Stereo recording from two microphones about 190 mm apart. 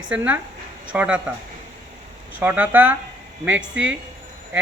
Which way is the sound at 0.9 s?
5° right (ahead or behind).